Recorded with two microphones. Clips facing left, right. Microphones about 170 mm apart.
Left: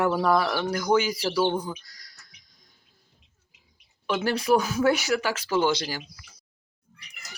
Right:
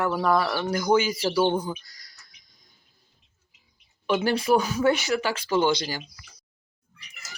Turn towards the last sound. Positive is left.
turn(degrees=5)  # may be behind; listen again after turning